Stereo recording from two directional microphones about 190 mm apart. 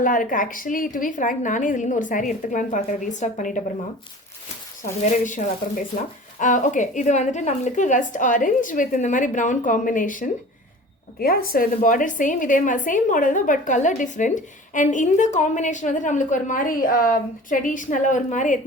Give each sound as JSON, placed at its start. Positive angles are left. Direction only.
{"t": 0.0, "sound": "a woman's voice", "side_deg": 45}
{"t": 5.0, "sound": "a woman's voice", "side_deg": 40}